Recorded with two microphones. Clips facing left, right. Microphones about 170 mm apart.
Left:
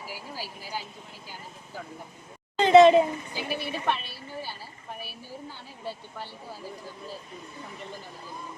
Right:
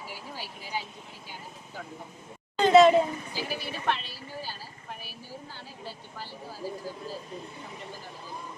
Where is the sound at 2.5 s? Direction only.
20° left (ahead or behind).